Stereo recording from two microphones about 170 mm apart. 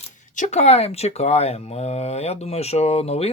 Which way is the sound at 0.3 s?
45° left (ahead or behind).